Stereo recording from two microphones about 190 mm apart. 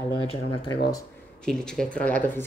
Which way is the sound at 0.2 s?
25° left (ahead or behind).